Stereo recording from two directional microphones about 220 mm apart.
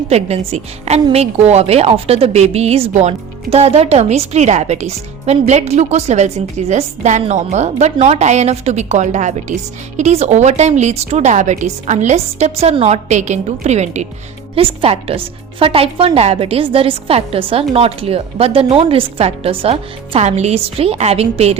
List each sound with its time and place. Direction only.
0.1 s speech: 30° right (ahead or behind)